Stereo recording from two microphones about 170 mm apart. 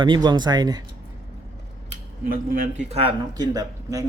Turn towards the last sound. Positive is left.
turn(degrees=-20)  # may be behind; listen again after turning